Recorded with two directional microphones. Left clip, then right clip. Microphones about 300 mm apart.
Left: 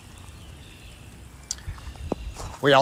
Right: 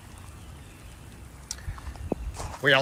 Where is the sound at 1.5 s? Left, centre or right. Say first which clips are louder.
Left 4 dB; centre.